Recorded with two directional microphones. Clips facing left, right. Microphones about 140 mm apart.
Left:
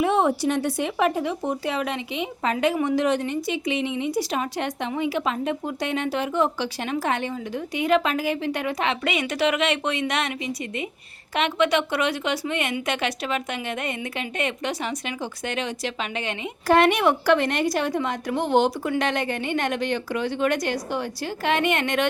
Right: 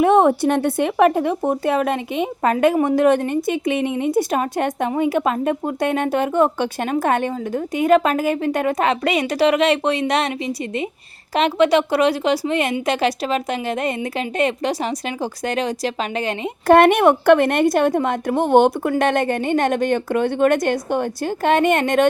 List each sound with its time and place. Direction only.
0.0 s speech: 55° right (ahead or behind); by 16.5 s 40° right (ahead or behind)
16.6 s speech: 55° right (ahead or behind)